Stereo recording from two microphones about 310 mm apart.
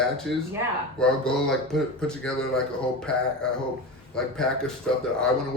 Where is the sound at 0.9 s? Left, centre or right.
Centre.